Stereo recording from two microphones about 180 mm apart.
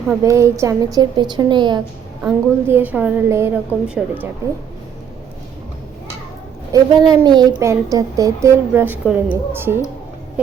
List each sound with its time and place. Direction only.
0.2 s a woman's voice: 15° right (ahead or behind)
2.2 s a woman's voice: 10° right (ahead or behind)
6.7 s a woman's voice: 20° right (ahead or behind)